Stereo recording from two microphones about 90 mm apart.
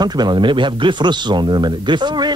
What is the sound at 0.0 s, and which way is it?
Speech, 55° right (ahead or behind).